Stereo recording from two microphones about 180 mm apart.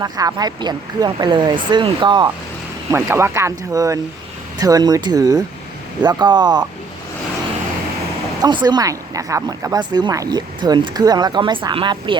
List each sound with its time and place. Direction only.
0.0 s speech: 20° right (ahead or behind)
2.9 s speech: 15° right (ahead or behind)
8.4 s speech: 25° right (ahead or behind)